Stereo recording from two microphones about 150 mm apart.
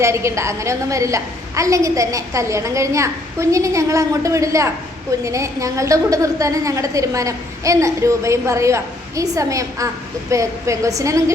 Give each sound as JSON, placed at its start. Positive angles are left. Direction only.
{"t": 0.0, "sound": "a woman's voice", "side_deg": -20}